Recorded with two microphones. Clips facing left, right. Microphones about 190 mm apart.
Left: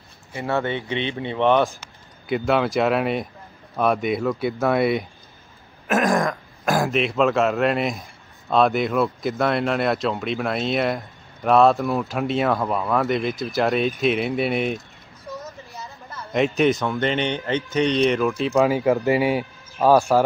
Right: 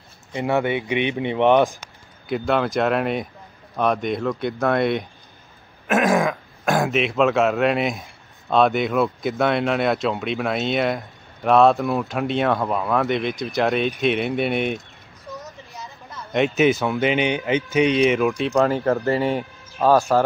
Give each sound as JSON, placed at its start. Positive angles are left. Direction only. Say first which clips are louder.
{"t": 0.3, "sound": "speech", "louder": "right 3 dB", "side_deg": -15}
{"t": 2.2, "sound": "speech", "louder": "left 1 dB", "side_deg": 0}